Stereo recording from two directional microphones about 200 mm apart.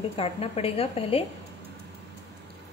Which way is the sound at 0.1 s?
30° left (ahead or behind).